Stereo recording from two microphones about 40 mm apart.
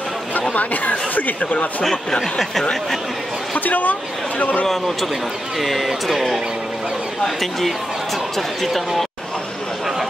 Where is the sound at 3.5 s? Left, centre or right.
Left.